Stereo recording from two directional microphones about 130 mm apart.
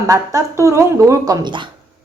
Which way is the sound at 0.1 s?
25° right (ahead or behind).